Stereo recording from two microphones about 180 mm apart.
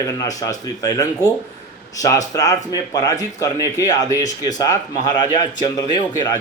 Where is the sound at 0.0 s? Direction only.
20° left (ahead or behind).